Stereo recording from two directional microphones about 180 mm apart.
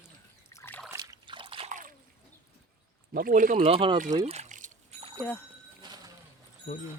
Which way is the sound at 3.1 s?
50° right (ahead or behind).